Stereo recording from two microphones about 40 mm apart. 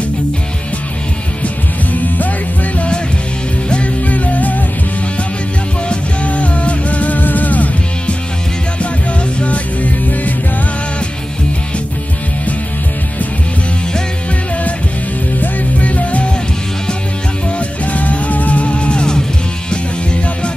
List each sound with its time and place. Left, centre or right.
1.4 s music: left
3.7 s music: left
6.2 s music: left
9.4 s music: left
15.4 s music: left
17.6 s music: left